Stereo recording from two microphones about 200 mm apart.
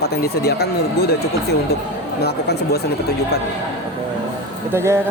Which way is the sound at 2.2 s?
55° left (ahead or behind).